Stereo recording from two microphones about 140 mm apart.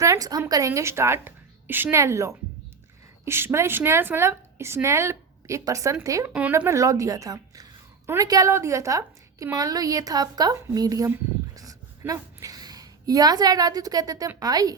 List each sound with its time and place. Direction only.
0.0 s a woman's voice: 25° right (ahead or behind)
6.3 s a woman's voice: 10° right (ahead or behind); by 14.8 s 25° right (ahead or behind)